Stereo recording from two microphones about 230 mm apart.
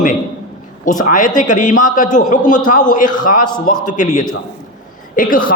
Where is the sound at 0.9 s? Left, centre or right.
Left.